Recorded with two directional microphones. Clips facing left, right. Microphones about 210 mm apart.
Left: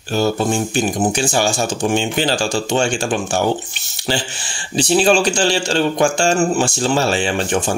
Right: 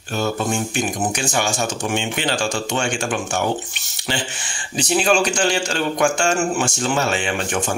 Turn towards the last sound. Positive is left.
turn(degrees=30)  # may be behind; listen again after turning